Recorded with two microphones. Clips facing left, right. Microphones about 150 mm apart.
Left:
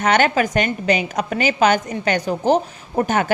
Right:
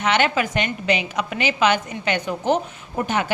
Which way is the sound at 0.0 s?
45° left (ahead or behind).